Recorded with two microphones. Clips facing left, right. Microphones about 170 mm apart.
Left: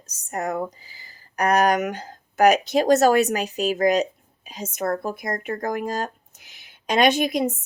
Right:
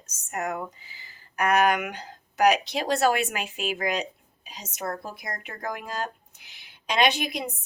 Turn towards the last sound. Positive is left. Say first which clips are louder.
# left 6 dB
turn(degrees=45)  # may be behind; listen again after turning